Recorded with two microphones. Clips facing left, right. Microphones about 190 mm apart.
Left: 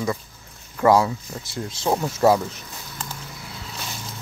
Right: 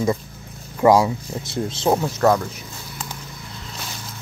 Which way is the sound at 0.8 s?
15° right (ahead or behind).